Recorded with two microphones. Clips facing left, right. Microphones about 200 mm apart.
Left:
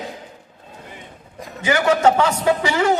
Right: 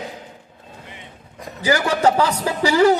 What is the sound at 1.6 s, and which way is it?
Speech, 35° right (ahead or behind).